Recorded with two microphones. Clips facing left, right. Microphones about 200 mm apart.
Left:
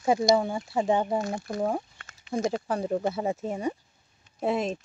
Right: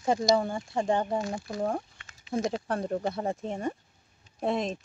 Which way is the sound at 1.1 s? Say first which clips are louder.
Left 2 dB; 45° left (ahead or behind).